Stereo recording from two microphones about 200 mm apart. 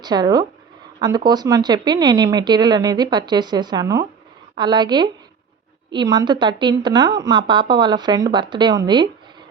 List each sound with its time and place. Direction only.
0.0 s speech: 20° right (ahead or behind)